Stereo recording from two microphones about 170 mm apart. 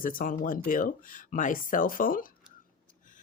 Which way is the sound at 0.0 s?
55° left (ahead or behind).